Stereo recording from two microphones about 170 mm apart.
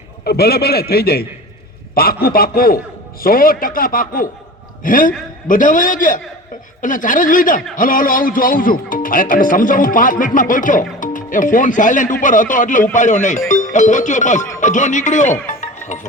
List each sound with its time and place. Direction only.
0.3 s a man's voice: 65° left (ahead or behind); by 15.4 s 45° left (ahead or behind)